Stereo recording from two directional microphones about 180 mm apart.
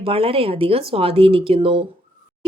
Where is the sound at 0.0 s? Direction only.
30° right (ahead or behind).